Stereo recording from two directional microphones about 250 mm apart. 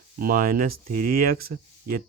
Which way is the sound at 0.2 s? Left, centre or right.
Right.